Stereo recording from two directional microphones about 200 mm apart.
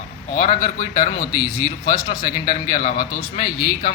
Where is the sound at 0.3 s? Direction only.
40° left (ahead or behind).